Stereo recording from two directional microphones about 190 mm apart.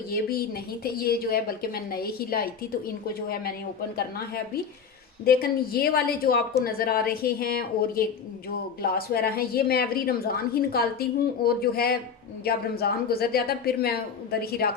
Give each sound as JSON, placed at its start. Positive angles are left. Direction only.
{"t": 0.1, "sound": "speech", "side_deg": 55}
{"t": 5.2, "sound": "a woman's voice", "side_deg": 50}